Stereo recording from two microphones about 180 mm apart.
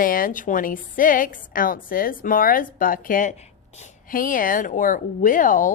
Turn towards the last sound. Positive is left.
turn(degrees=45)  # may be behind; listen again after turning